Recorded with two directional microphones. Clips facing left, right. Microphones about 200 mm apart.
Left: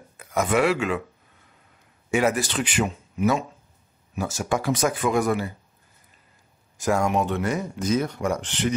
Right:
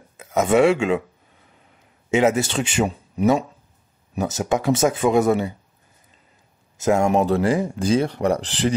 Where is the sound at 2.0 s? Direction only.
20° right (ahead or behind).